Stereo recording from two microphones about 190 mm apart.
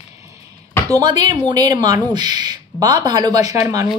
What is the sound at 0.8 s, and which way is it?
Speech, 20° right (ahead or behind).